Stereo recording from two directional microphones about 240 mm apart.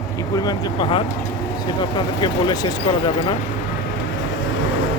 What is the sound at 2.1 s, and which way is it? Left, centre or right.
Speech, centre.